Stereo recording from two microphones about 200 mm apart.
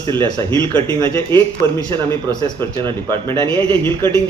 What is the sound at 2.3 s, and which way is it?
Speech, 20° left (ahead or behind).